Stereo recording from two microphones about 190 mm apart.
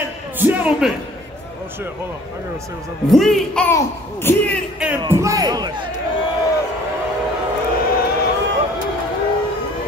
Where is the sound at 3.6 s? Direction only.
10° left (ahead or behind).